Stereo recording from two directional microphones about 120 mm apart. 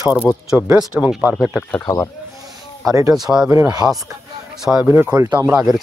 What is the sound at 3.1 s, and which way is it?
Speech, 5° right (ahead or behind).